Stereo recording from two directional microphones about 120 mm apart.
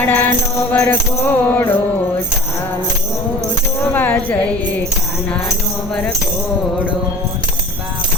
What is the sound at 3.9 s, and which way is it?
Music, 15° left (ahead or behind).